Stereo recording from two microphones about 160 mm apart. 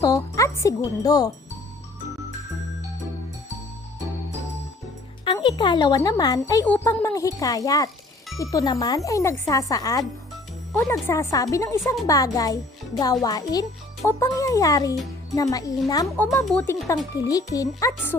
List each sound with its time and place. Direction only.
0.0 s speech: 20° left (ahead or behind)
5.2 s a child's voice: 30° left (ahead or behind)
16.1 s speech: 10° left (ahead or behind)